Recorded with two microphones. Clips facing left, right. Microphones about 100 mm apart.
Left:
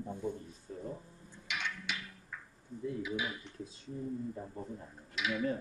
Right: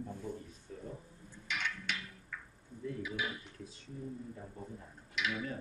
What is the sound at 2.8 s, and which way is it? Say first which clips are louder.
Speech: left 3 dB; 20° left (ahead or behind).